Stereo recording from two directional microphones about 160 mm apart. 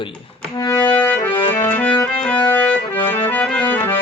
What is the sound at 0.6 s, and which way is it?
Music, 25° left (ahead or behind).